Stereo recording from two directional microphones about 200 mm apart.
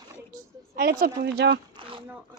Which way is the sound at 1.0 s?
55° right (ahead or behind).